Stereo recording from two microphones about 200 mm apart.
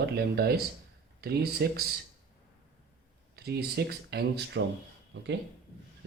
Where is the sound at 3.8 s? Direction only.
55° right (ahead or behind).